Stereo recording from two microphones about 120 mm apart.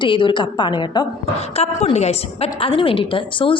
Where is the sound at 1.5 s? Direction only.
60° left (ahead or behind).